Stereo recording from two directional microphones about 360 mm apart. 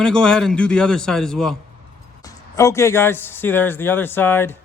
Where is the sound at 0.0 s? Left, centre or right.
Centre.